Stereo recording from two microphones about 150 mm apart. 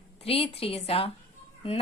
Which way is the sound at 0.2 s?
40° left (ahead or behind).